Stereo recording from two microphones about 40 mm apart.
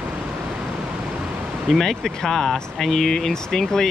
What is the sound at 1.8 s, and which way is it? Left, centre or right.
Speech, centre.